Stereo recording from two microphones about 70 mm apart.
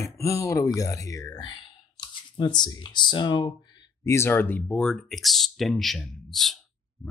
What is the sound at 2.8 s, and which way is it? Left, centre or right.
Speech, left.